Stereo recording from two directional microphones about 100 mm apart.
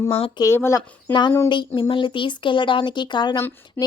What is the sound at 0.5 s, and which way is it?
Speech, 25° left (ahead or behind).